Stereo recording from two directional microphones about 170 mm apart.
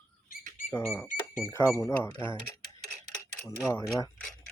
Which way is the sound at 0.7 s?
15° left (ahead or behind).